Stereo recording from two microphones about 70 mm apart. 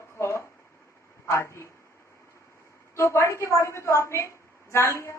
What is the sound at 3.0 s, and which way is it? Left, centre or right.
A woman's voice, left.